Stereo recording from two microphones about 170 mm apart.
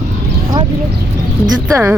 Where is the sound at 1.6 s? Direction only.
15° right (ahead or behind).